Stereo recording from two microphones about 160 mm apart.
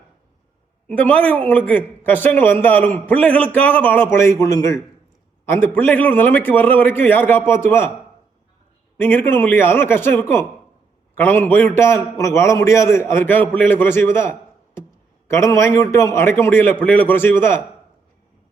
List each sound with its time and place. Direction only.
0.9 s a man's voice: 10° left (ahead or behind)
9.0 s a man's voice: 15° left (ahead or behind)